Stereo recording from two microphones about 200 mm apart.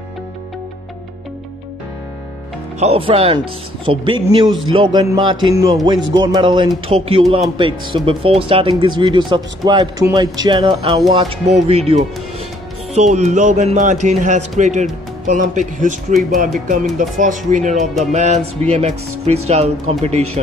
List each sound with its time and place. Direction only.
2.8 s speech: 30° right (ahead or behind)
16.1 s speech: centre (ahead or behind)
16.5 s speech: 40° right (ahead or behind)